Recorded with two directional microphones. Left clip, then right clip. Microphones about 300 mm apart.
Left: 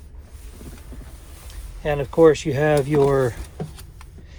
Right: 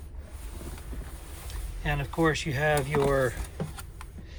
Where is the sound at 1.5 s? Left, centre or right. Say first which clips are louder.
Left 9 dB; centre.